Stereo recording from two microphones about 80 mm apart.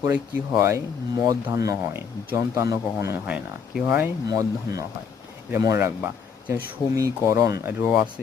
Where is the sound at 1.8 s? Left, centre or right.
Right.